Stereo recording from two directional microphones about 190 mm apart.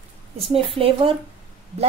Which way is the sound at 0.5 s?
30° right (ahead or behind).